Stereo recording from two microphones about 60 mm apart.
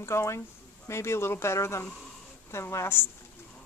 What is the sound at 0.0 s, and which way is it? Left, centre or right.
A woman's voice, left.